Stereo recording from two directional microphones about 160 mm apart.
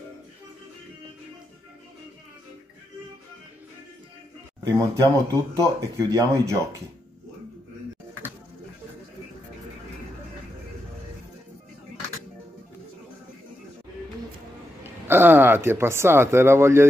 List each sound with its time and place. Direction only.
4.6 s speech: 20° right (ahead or behind)
14.8 s speech: 15° right (ahead or behind)